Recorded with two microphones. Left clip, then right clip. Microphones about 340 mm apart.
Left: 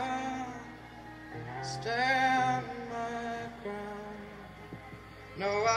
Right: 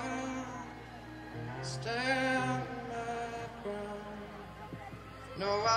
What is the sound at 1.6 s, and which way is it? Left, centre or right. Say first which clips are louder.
Music: left 5 dB; centre.